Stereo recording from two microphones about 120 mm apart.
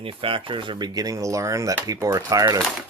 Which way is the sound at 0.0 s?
50° right (ahead or behind).